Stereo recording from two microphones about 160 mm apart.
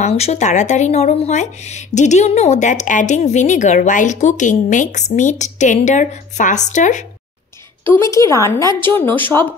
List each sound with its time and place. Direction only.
0.0 s speech: 40° left (ahead or behind)
7.8 s a woman's voice: 15° left (ahead or behind)